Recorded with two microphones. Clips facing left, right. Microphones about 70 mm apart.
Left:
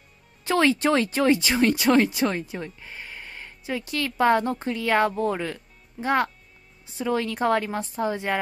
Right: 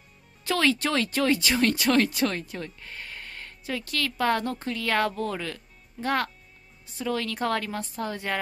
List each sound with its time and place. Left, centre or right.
0.4 s a woman's voice: left
3.2 s a sound: centre
3.6 s a woman's voice: centre